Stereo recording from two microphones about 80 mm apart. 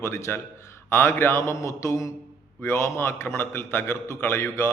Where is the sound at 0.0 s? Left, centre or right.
Left.